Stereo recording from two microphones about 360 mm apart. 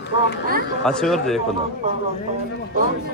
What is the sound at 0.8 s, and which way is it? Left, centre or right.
Speech, centre.